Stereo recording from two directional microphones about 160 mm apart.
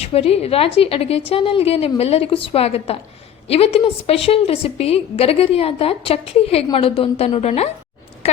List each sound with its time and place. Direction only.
0.0 s a woman's voice: 40° left (ahead or behind)